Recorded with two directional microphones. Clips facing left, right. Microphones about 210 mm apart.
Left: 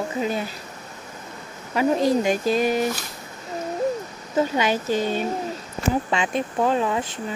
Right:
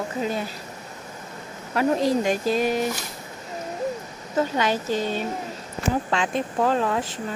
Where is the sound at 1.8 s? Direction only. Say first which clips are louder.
Left 1 dB; centre (ahead or behind).